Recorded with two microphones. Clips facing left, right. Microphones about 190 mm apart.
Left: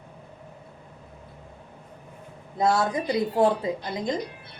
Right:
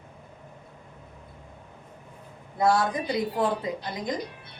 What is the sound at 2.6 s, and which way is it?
A woman's voice, 25° left (ahead or behind).